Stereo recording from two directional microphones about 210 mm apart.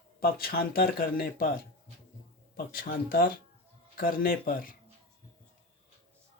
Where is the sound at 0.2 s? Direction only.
45° left (ahead or behind).